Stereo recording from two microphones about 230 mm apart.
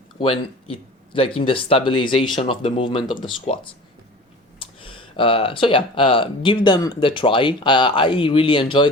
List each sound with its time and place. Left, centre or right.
0.2 s speech: left